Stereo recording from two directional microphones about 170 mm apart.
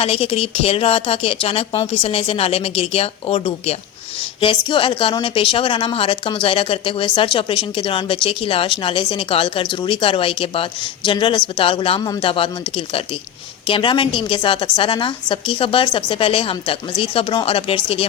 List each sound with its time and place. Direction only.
0.0 s speech: 35° left (ahead or behind)